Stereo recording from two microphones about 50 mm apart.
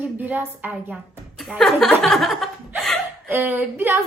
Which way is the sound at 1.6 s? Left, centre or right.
Centre.